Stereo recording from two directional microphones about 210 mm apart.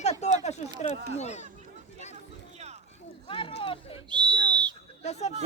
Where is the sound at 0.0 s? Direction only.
30° left (ahead or behind).